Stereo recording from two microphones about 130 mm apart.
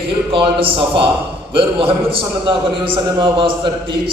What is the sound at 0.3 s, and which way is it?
A man's voice, 45° right (ahead or behind).